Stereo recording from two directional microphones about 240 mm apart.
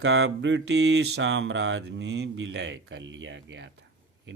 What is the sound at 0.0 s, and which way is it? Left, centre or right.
Speech, right.